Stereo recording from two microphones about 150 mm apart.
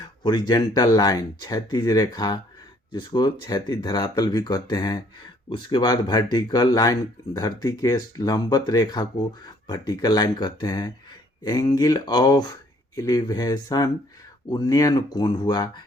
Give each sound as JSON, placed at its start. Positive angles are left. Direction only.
{"t": 0.0, "sound": "speech", "side_deg": 30}